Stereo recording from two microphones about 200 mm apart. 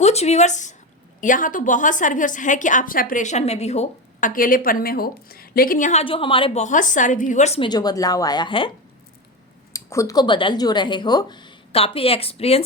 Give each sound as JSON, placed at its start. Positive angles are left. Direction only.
{"t": 0.0, "sound": "a woman's voice", "side_deg": 30}
{"t": 9.7, "sound": "speech", "side_deg": 15}